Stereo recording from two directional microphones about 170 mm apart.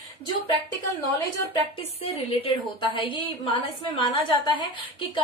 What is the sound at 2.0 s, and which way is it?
A woman's voice, 35° left (ahead or behind).